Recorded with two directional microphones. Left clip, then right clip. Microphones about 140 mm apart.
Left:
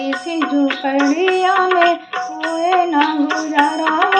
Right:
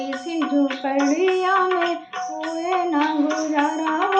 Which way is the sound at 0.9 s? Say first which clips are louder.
Left 3 dB; 35° left (ahead or behind).